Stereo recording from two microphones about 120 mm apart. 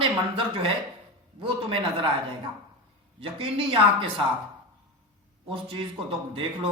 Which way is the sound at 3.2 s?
50° right (ahead or behind).